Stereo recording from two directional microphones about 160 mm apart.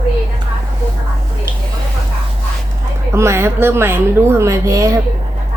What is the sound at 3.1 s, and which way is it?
A woman's voice, 15° right (ahead or behind).